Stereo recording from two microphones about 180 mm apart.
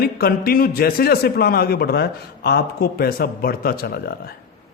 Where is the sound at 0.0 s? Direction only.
55° left (ahead or behind).